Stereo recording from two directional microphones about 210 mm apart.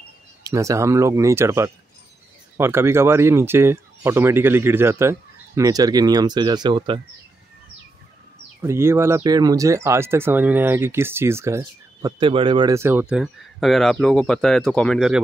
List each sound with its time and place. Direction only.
0.4 s speech: 15° right (ahead or behind)
8.5 s speech: 10° right (ahead or behind)
13.1 s speech: centre (ahead or behind)